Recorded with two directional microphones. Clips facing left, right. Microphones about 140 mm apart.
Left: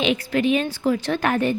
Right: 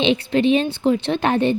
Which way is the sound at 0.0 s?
25° right (ahead or behind).